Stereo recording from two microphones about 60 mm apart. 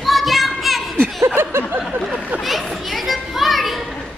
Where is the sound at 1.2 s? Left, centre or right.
Right.